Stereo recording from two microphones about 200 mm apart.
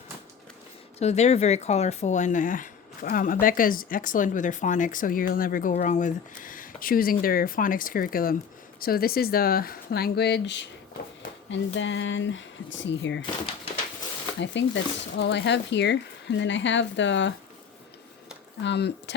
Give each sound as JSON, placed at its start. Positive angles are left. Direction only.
{"t": 0.9, "sound": "speech", "side_deg": 35}
{"t": 14.4, "sound": "speech", "side_deg": 65}
{"t": 18.6, "sound": "speech", "side_deg": 60}